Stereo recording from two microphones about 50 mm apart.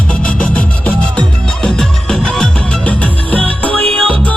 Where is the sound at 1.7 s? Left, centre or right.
Centre.